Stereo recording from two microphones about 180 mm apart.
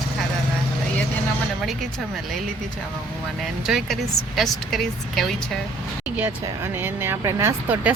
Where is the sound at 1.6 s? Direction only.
Centre (ahead or behind).